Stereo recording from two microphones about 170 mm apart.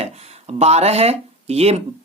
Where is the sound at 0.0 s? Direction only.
40° right (ahead or behind).